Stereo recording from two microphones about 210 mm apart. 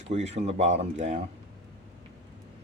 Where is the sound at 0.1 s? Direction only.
30° right (ahead or behind).